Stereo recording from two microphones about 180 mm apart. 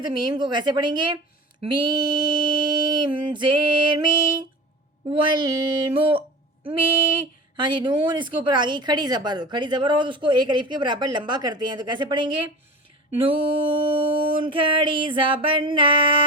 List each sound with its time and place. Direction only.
0.0 s a woman's voice: 25° right (ahead or behind)
7.5 s a woman's voice: 25° right (ahead or behind)